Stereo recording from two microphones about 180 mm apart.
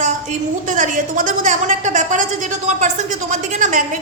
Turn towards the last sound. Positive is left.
turn(degrees=-45)  # may be behind; listen again after turning